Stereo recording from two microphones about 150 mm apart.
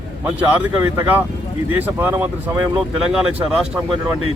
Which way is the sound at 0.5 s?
10° right (ahead or behind).